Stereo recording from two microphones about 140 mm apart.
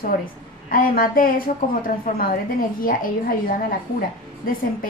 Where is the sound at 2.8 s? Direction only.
85° left.